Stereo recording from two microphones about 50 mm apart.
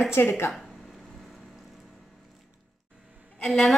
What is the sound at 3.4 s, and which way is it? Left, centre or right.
Speech, centre.